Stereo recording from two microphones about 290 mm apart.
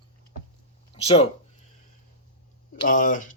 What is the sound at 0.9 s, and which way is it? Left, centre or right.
Speech, centre.